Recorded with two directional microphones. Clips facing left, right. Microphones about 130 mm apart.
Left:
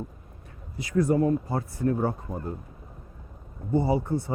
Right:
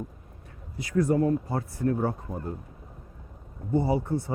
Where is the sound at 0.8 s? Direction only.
20° left (ahead or behind).